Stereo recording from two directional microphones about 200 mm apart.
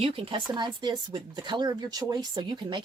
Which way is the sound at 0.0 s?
25° right (ahead or behind).